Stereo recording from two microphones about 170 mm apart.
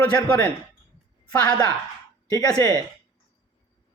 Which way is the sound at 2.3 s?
20° left (ahead or behind).